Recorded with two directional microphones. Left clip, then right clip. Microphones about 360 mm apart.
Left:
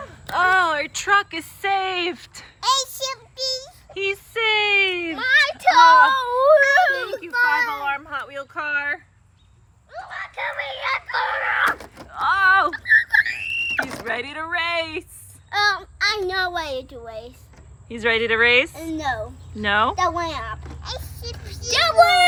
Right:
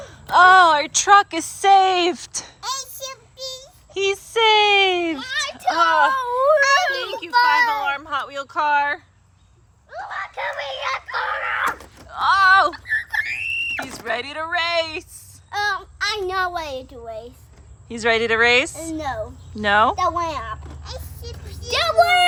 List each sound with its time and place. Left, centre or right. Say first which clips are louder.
0.3 s a woman's voice: right 7 dB; centre
1.5 s a sound: right 8 dB; centre
5.1 s children playing: left 8 dB; centre
5.8 s a child's voice: left 4 dB; centre
7.3 s speech: right 4 dB; centre
7.9 s speech: right 2 dB; centre
9.9 s a sound: right 3 dB; right; by 12.8 s centre
13.1 s screaming: left 3 dB; centre
15.7 s a child's voice: left 2 dB; centre